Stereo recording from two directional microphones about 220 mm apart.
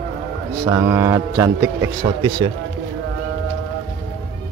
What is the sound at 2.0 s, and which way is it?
Speech, 20° right (ahead or behind).